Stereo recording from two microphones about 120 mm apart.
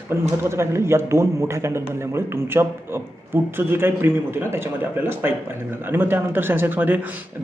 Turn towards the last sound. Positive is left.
turn(degrees=-15)  # may be behind; listen again after turning